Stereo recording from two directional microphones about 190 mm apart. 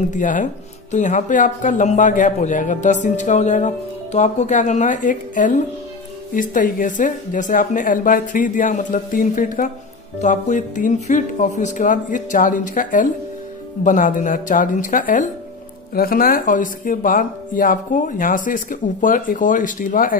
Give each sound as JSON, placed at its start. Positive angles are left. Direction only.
{"t": 0.1, "sound": "a man's voice", "side_deg": 45}